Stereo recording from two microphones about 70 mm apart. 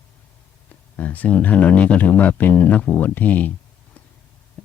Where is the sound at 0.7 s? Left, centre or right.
Left.